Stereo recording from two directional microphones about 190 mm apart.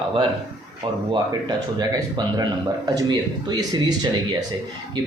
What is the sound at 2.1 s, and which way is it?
Speech, 20° right (ahead or behind).